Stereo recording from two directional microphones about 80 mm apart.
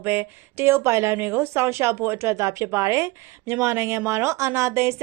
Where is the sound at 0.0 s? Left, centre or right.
Right.